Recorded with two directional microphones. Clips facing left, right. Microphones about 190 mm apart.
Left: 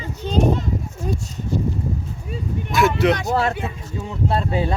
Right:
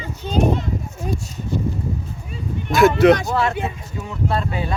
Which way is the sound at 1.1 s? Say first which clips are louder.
Even; 10° right (ahead or behind).